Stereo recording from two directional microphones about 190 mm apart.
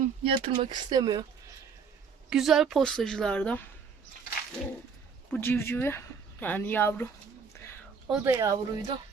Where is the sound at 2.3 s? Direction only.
Centre (ahead or behind).